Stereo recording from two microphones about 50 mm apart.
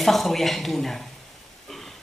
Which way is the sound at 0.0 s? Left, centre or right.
Centre.